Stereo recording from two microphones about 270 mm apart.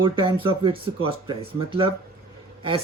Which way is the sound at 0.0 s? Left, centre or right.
Centre.